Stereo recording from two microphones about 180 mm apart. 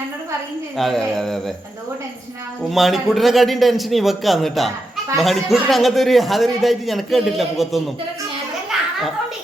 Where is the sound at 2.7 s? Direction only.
Centre (ahead or behind).